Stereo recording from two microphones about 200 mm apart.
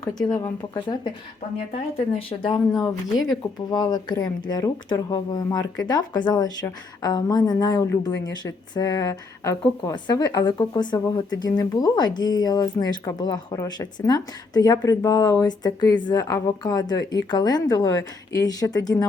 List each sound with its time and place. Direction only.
0.1 s speech: 5° left (ahead or behind)
0.7 s a woman's voice: 20° left (ahead or behind)